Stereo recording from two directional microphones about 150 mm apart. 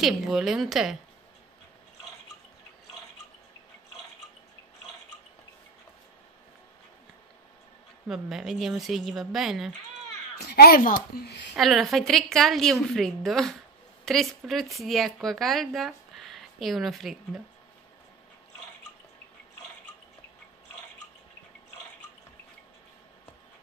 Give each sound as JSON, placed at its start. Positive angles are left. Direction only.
{"t": 0.0, "sound": "a woman's voice", "side_deg": 0}
{"t": 8.1, "sound": "a woman's voice", "side_deg": 0}
{"t": 10.4, "sound": "speech", "side_deg": 90}
{"t": 11.5, "sound": "a woman's voice", "side_deg": 0}